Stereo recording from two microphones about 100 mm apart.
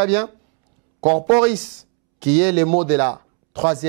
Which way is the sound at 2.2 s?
20° right (ahead or behind).